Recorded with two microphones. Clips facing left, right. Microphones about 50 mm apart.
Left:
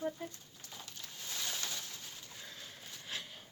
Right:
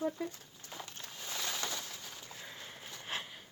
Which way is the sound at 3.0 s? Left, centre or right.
Right.